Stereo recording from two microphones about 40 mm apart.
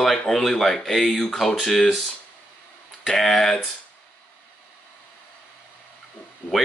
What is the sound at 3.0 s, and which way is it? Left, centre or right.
Speech, centre.